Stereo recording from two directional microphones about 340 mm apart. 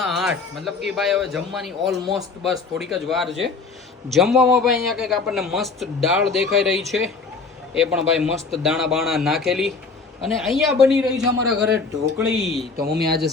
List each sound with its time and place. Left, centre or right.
0.0 s a sound: centre
0.9 s a man's voice: centre
12.1 s a man's voice: centre
12.7 s speech: right